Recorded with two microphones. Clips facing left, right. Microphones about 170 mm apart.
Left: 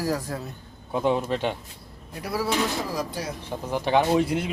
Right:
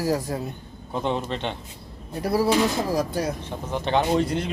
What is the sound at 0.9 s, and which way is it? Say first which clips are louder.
Speech: left 3 dB; 5° left (ahead or behind).